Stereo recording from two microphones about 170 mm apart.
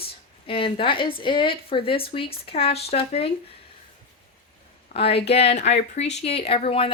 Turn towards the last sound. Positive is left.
turn(degrees=35)  # may be behind; listen again after turning